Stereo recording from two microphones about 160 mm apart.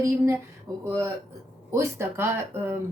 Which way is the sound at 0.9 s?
20° right (ahead or behind).